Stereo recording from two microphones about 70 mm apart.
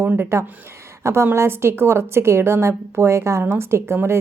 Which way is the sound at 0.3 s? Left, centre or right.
Right.